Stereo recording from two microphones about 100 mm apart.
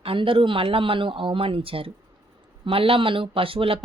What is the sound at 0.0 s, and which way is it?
Speech, 65° right (ahead or behind).